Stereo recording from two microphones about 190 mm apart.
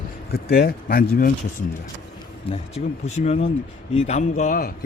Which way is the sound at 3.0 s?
35° left (ahead or behind).